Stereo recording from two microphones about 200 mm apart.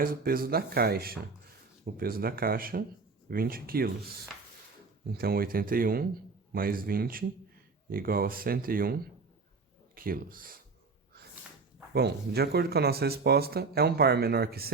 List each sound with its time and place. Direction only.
0.0 s speech: 45° right (ahead or behind)
11.9 s speech: 50° right (ahead or behind)